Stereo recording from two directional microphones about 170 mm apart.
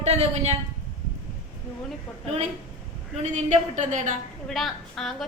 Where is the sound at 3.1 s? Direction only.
45° right (ahead or behind).